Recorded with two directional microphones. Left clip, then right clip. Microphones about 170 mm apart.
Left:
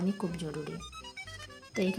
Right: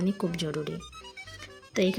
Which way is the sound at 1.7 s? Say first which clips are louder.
Right 6 dB; 20° right (ahead or behind).